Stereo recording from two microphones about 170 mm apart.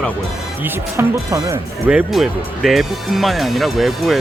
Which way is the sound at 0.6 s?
15° right (ahead or behind).